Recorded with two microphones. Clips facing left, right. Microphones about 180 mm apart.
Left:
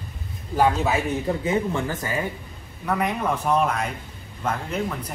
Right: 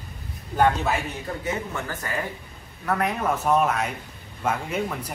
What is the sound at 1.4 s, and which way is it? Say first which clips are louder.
Speech: left 6 dB; 25° left (ahead or behind).